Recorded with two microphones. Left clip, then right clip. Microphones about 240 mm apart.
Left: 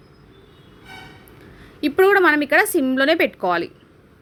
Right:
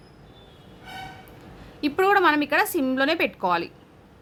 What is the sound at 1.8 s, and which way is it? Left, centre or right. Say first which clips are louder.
A woman's voice: left 5 dB; centre.